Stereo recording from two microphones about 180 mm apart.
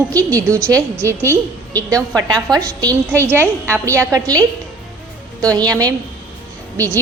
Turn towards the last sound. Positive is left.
turn(degrees=-15)  # may be behind; listen again after turning